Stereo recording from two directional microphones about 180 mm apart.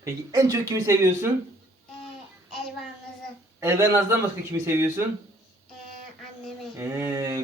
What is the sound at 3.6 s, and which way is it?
A man's voice, 15° right (ahead or behind).